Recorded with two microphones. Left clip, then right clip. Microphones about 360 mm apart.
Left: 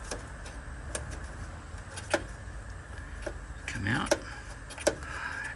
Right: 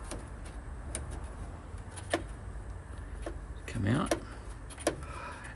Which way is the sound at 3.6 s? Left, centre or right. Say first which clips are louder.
Left 2 dB; centre.